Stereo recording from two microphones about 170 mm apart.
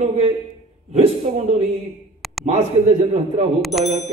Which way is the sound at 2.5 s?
35° right (ahead or behind).